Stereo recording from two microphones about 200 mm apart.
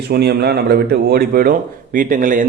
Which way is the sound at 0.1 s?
50° right (ahead or behind).